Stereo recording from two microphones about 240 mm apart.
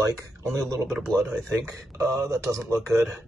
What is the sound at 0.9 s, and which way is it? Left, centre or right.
Speech, centre.